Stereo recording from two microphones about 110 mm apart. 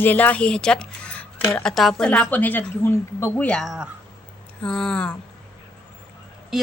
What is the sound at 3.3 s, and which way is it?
Speech, 10° left (ahead or behind).